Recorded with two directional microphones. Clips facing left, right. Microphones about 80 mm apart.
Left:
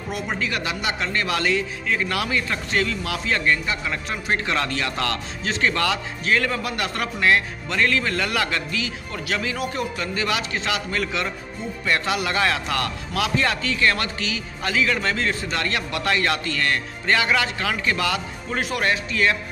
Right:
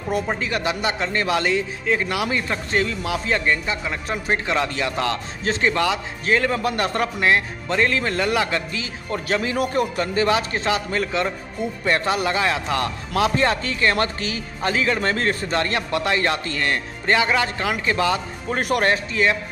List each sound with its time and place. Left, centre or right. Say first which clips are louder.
0.3 s a man's voice: right 3 dB; right
9.6 s a man's voice: right 5 dB; right
10.1 s a man's voice: right 6 dB; right
18.6 s a man's voice: right 4 dB; right
18.9 s a man's voice: right 2 dB; right